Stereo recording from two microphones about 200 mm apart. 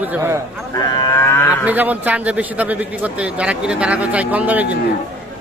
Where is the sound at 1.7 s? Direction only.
10° right (ahead or behind).